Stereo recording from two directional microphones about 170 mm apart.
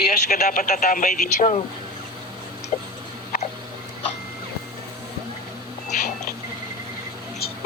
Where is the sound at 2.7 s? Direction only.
45° left (ahead or behind).